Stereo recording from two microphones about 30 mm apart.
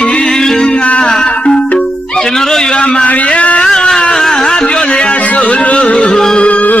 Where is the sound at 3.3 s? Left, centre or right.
Left.